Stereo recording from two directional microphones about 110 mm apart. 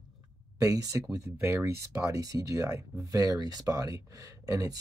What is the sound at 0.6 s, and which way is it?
Speech, 30° right (ahead or behind).